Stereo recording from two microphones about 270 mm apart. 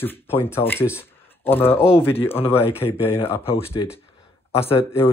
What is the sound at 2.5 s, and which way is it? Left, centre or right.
Speech, centre.